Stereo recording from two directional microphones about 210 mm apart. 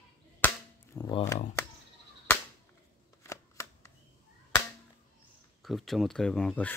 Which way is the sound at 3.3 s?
15° left (ahead or behind).